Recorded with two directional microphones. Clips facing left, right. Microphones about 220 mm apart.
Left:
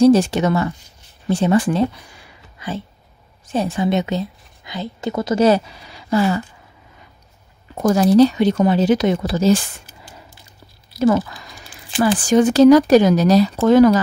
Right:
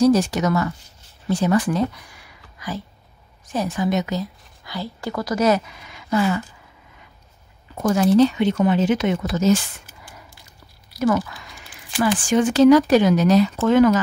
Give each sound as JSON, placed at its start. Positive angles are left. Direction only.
{"t": 0.0, "sound": "a woman's voice", "side_deg": 25}
{"t": 7.8, "sound": "speech", "side_deg": 35}
{"t": 11.0, "sound": "speech", "side_deg": 25}